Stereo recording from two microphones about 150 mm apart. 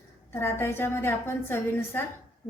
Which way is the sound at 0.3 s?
15° left (ahead or behind).